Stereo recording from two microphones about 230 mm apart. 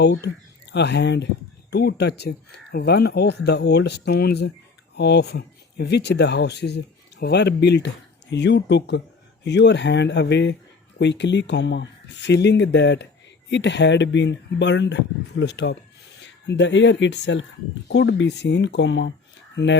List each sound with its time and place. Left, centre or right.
0.0 s speech: left